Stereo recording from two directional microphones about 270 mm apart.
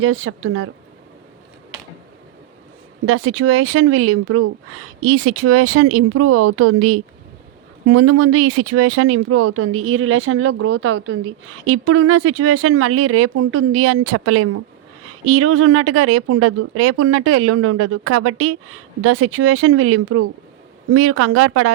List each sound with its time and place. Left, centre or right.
0.0 s speech: right
3.1 s a woman's voice: right